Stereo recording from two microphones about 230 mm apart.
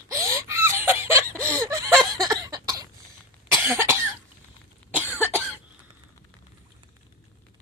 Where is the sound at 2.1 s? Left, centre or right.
Centre.